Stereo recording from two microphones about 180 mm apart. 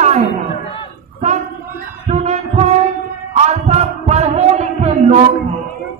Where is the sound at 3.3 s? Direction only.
35° right (ahead or behind).